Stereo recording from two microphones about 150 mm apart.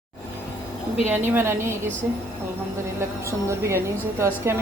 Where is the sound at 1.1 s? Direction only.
15° right (ahead or behind).